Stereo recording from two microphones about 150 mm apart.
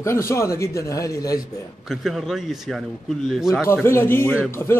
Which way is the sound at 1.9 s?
Centre (ahead or behind).